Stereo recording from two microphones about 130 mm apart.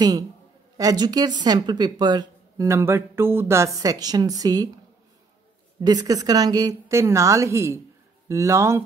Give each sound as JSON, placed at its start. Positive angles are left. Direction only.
{"t": 0.7, "sound": "speech", "side_deg": -30}
{"t": 2.6, "sound": "speech", "side_deg": -20}
{"t": 5.8, "sound": "speech", "side_deg": -30}